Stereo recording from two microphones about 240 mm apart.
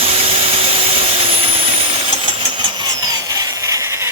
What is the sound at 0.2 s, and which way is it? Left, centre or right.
Vehicle, right.